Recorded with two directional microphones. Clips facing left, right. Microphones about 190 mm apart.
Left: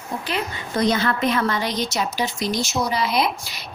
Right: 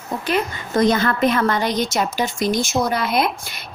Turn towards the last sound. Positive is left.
turn(degrees=-55)  # may be behind; listen again after turning